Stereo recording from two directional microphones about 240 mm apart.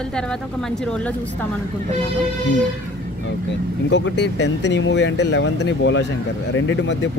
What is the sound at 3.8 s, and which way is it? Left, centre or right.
Speech, left.